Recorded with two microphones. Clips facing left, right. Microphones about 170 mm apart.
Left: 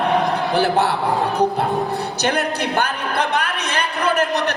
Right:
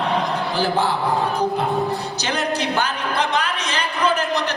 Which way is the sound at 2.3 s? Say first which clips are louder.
Left 1 dB; 60° left (ahead or behind).